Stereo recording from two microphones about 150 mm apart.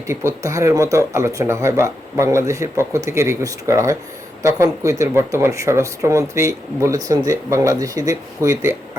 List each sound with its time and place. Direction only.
0.1 s speech: 20° right (ahead or behind)